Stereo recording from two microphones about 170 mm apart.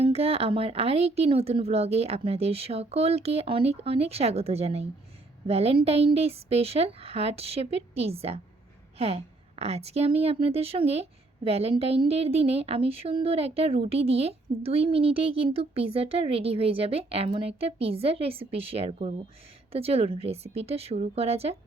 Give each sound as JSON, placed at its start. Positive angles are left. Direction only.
{"t": 0.0, "sound": "a woman's voice", "side_deg": -35}